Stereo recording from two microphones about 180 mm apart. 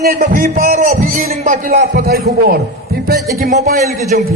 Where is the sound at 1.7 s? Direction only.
65° right (ahead or behind).